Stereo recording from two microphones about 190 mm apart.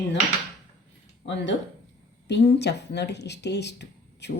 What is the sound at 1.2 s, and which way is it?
Speech, 70° left (ahead or behind).